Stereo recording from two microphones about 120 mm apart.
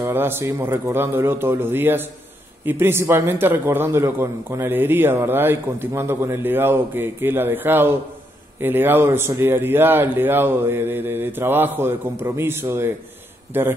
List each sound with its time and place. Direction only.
0.0 s a man's voice: 20° right (ahead or behind)